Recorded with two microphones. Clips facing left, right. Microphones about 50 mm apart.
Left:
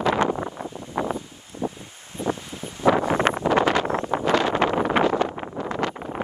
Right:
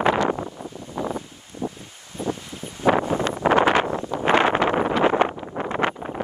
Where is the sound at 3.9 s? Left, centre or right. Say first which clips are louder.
Left 2 dB; left.